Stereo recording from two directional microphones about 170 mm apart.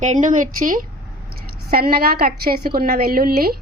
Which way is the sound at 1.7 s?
65° right (ahead or behind).